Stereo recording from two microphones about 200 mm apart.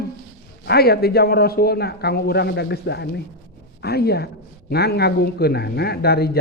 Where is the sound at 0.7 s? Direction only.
50° left (ahead or behind).